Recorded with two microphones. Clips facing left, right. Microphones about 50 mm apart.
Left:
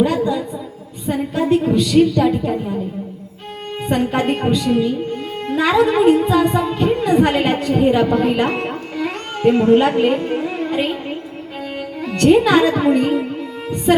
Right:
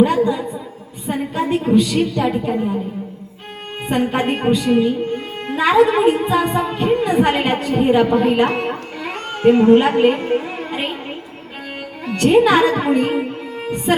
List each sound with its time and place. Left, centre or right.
0.0 s a sound: centre
1.0 s a woman's voice: centre
3.8 s a woman's voice: centre
9.0 s music: centre
12.0 s speech: centre